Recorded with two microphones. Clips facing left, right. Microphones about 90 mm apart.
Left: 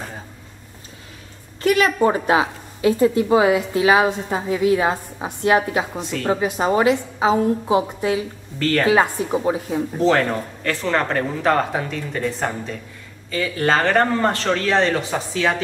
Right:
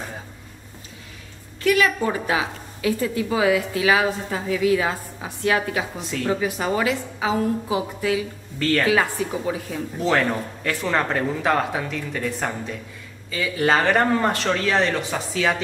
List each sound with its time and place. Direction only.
1.6 s a woman's voice: 30° left (ahead or behind)
8.5 s speech: centre (ahead or behind)
8.8 s a woman's voice: 30° left (ahead or behind)
10.0 s speech: centre (ahead or behind)